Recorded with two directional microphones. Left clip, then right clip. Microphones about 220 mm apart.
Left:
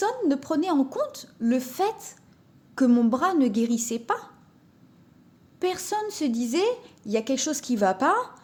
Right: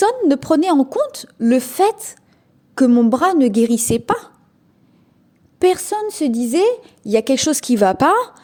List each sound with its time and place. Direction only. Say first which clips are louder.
0.0 s a woman's voice: right 10 dB; 40° right (ahead or behind)
5.5 s a woman's voice: right 11 dB; 35° right (ahead or behind)